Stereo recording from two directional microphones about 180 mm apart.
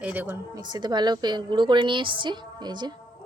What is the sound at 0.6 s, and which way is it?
A woman's voice, 25° right (ahead or behind).